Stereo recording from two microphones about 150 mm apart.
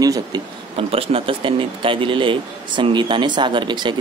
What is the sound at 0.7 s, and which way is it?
Speech, 40° right (ahead or behind).